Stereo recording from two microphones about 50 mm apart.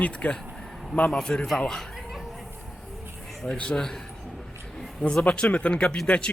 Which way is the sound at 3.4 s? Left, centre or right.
Centre.